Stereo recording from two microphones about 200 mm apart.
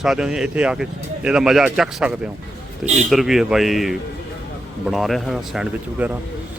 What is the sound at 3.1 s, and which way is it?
Speech, centre (ahead or behind).